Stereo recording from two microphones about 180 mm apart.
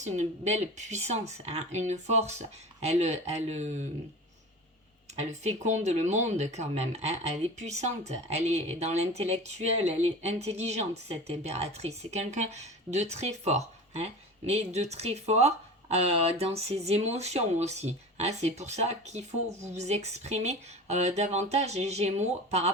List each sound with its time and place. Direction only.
0.0 s speech: 40° right (ahead or behind)
5.3 s speech: 40° right (ahead or behind)